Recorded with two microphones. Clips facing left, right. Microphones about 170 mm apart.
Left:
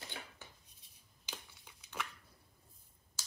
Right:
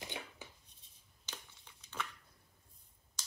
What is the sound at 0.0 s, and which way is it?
Dishes, 20° right (ahead or behind).